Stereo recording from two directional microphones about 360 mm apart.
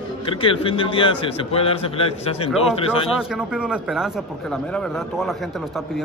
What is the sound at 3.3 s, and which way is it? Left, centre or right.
A man's voice, centre.